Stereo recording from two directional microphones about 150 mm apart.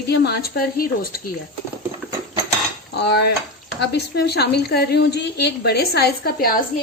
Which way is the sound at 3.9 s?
90° left.